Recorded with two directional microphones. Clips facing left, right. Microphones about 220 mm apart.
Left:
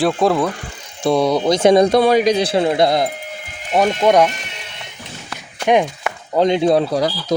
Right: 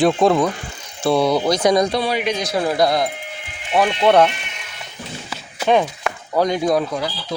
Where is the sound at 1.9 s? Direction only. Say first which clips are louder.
Left 8 dB; 50° left (ahead or behind).